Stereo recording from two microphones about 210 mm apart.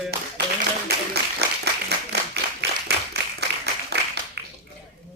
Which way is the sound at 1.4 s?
50° right (ahead or behind).